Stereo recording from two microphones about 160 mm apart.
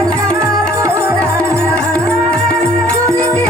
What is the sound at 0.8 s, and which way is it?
Music, 20° right (ahead or behind).